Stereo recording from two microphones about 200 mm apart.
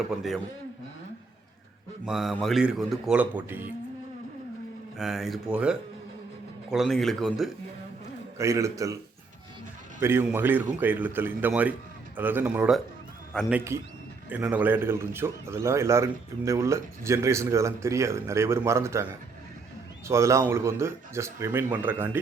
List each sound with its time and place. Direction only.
2.0 s speech: centre (ahead or behind)
4.9 s speech: centre (ahead or behind)
8.4 s a man's voice: 15° right (ahead or behind)
10.0 s a man's voice: 10° right (ahead or behind)
20.1 s a man's voice: 15° right (ahead or behind)